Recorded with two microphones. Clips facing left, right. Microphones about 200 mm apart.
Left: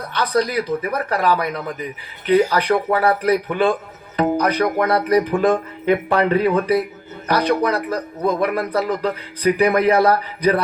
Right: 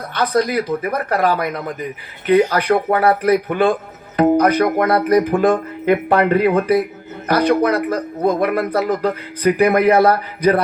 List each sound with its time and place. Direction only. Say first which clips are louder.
0.1 s speech: right 2 dB; 50° right (ahead or behind)